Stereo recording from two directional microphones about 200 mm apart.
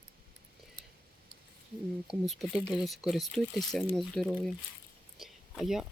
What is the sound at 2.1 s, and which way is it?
Speech, centre (ahead or behind).